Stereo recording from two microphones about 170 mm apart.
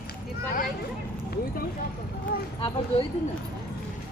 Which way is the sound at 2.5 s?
30° left (ahead or behind).